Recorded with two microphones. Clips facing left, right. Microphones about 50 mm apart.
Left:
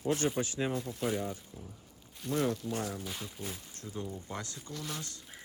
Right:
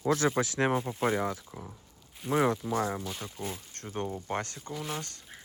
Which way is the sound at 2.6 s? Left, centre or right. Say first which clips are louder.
Right 6 dB; right.